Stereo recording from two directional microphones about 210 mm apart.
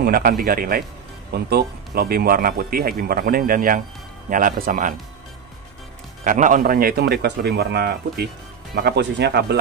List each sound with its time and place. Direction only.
0.0 s speech: 45° right (ahead or behind)
6.2 s speech: 40° right (ahead or behind)